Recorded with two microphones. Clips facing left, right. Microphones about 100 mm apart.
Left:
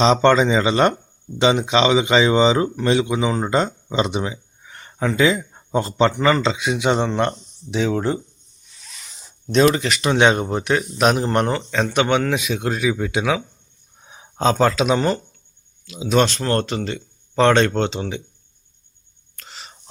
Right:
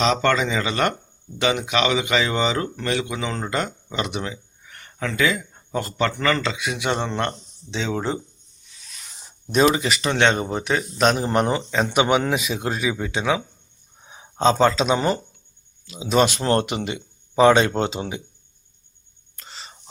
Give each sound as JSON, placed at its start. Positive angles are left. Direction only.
{"t": 0.0, "sound": "speech", "side_deg": 25}
{"t": 7.9, "sound": "a man's voice", "side_deg": 0}
{"t": 9.5, "sound": "a man's voice", "side_deg": -5}
{"t": 11.3, "sound": "a man's voice", "side_deg": -10}
{"t": 16.4, "sound": "speech", "side_deg": -20}
{"t": 19.4, "sound": "whispering", "side_deg": 0}